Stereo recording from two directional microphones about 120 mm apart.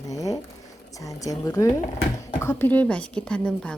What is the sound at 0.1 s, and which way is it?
A woman's voice, 30° left (ahead or behind).